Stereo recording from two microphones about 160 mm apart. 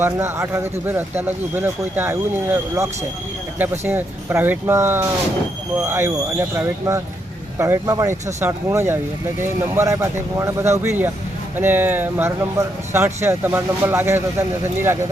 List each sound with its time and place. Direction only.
0.0 s speech: 15° right (ahead or behind)